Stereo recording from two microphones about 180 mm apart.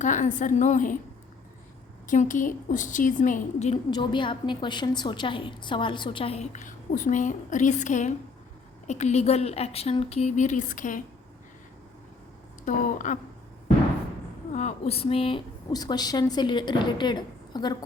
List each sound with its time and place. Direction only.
0.0 s a woman's voice: 45° left (ahead or behind)
2.0 s a woman's voice: 45° left (ahead or behind)
3.9 s a woman's voice: 25° left (ahead or behind); by 11.0 s 45° left (ahead or behind)
12.6 s a woman's voice: 45° left (ahead or behind)
14.5 s a woman's voice: 35° left (ahead or behind)